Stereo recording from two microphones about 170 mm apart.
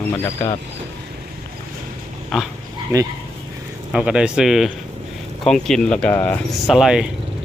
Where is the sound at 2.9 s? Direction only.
15° right (ahead or behind).